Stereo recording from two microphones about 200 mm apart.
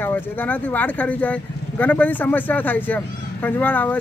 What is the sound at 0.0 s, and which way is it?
Speech, 10° left (ahead or behind).